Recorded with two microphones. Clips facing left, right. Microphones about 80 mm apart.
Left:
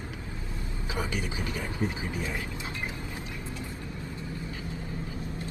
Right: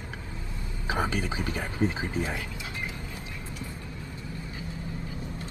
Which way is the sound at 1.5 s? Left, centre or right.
Right.